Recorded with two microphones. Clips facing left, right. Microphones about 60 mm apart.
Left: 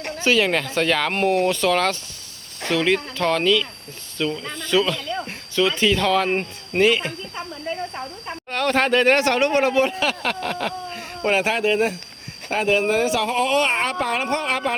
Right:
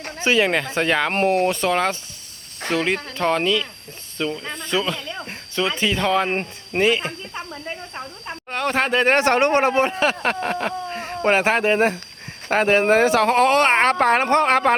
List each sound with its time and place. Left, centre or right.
0.2 s speech: right
4.5 s speech: right
4.8 s speech: centre
5.1 s cricket: centre
5.5 s speech: right
8.4 s speech: centre; by 14.8 s right